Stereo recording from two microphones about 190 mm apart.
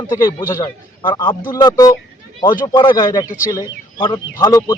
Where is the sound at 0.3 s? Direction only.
20° left (ahead or behind).